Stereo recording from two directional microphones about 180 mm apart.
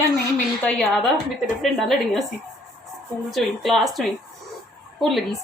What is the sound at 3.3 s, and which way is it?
Speech, centre (ahead or behind).